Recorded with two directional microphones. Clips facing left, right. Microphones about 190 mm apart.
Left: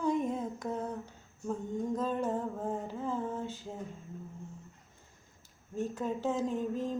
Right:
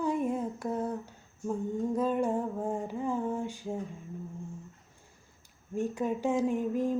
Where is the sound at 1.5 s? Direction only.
10° right (ahead or behind).